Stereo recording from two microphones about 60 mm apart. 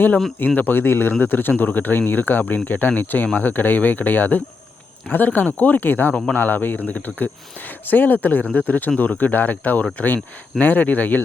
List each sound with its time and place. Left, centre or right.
0.3 s speech: left